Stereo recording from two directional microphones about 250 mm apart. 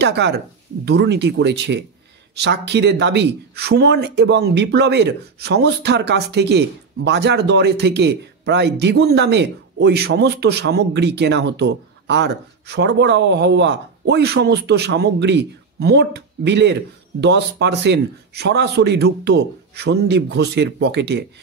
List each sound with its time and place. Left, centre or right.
0.0 s speech: right